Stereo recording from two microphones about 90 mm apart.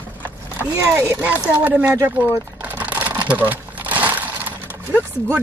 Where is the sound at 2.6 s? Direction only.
20° right (ahead or behind).